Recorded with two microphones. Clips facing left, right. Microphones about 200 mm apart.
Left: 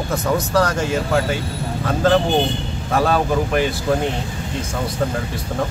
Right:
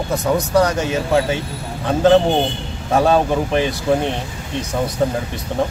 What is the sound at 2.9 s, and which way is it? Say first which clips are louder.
Speech: right 3 dB; 25° right (ahead or behind).